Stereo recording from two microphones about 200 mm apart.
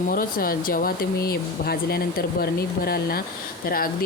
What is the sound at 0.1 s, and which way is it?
Speech, 45° left (ahead or behind).